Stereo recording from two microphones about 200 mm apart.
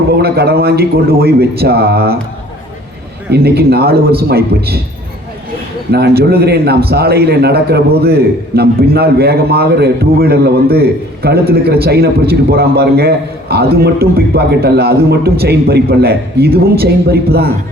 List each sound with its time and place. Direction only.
0.1 s a man's voice: 50° right (ahead or behind)
3.3 s a man's voice: 50° right (ahead or behind)
5.9 s a man's voice: 50° right (ahead or behind)